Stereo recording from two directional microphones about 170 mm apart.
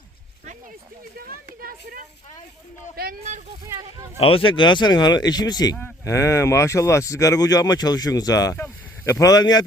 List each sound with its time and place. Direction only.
1.1 s speech: 60° right (ahead or behind)
4.2 s speech: 30° left (ahead or behind)